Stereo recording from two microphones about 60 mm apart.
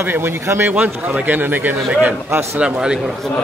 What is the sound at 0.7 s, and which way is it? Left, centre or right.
A man's voice, right.